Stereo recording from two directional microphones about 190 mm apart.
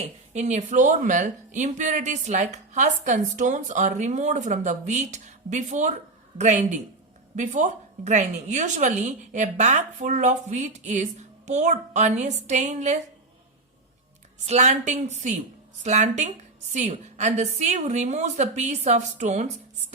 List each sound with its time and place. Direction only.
0.0 s speech: 35° right (ahead or behind)
14.4 s speech: 35° right (ahead or behind)